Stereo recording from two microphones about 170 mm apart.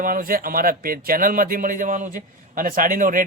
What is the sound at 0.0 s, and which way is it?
Speech, 55° right (ahead or behind).